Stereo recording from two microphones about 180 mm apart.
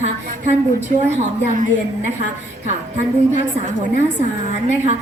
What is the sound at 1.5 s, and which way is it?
Speech, 45° right (ahead or behind).